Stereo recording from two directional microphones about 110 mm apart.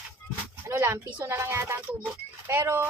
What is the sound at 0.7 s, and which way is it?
Music, 20° right (ahead or behind).